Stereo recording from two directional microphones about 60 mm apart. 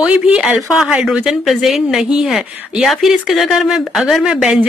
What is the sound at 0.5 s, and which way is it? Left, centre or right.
Speech, centre.